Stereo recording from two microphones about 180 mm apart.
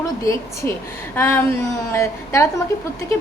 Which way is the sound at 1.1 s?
10° left (ahead or behind).